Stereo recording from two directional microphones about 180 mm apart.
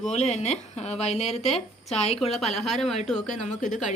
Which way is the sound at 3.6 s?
45° left (ahead or behind).